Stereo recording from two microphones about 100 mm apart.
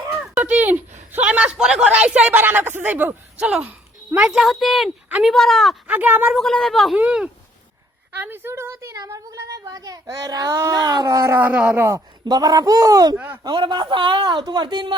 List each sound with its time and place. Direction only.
0.1 s a man's voice: 15° right (ahead or behind)
4.3 s speech: centre (ahead or behind)
5.9 s speech: 15° right (ahead or behind)
6.3 s speech: 5° left (ahead or behind)
6.9 s a woman's voice: 10° right (ahead or behind); by 11.3 s 30° right (ahead or behind)
11.3 s speech: 15° right (ahead or behind)
11.8 s a woman's voice: 30° right (ahead or behind)
12.2 s speech: 40° right (ahead or behind)
13.1 s a woman's voice: 20° right (ahead or behind)
13.4 s speech: 50° right (ahead or behind)
14.3 s speech: 45° right (ahead or behind)